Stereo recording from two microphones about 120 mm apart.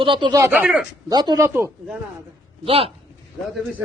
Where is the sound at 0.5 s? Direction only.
10° right (ahead or behind).